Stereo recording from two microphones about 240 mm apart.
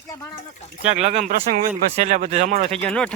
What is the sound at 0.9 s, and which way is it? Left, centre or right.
Speech, right.